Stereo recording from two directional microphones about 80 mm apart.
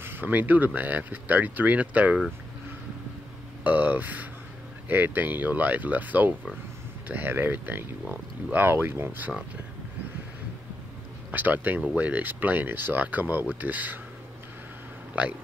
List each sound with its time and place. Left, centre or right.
0.0 s speech: right
3.6 s speech: right
11.3 s speech: right
15.2 s speech: centre